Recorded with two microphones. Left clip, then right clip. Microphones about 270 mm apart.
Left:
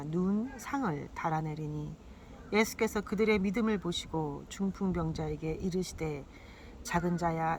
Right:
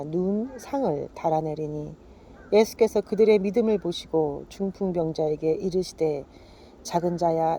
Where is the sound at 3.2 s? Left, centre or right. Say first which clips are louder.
Right 10 dB; right.